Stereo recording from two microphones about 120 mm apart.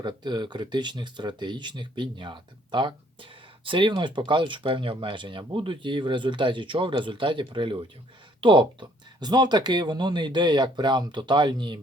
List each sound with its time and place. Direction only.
0.0 s speech: 40° right (ahead or behind)